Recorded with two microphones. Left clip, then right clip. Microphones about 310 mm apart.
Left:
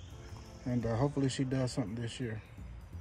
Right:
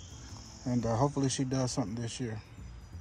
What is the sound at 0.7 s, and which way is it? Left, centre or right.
Speech, centre.